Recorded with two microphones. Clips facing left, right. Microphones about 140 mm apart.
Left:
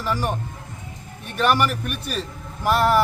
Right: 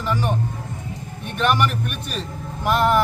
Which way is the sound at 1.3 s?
5° left (ahead or behind).